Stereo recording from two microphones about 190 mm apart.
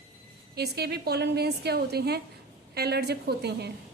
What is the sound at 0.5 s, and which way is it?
A woman's voice, 60° right (ahead or behind).